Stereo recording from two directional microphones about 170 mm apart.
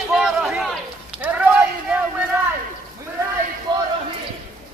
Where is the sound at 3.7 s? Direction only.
25° right (ahead or behind).